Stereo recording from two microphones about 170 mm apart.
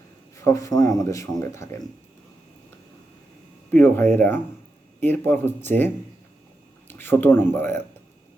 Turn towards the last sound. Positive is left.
turn(degrees=10)  # may be behind; listen again after turning